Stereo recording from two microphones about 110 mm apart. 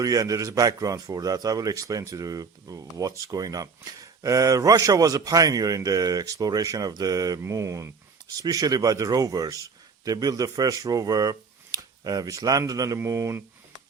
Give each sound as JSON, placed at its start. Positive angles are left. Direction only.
{"t": 0.0, "sound": "a man's voice", "side_deg": -35}